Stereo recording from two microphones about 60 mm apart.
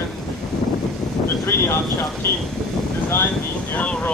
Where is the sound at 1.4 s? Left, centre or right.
Left.